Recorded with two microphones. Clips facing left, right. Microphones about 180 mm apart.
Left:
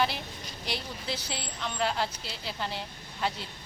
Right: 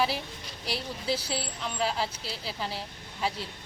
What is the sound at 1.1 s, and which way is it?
Speech, 30° right (ahead or behind).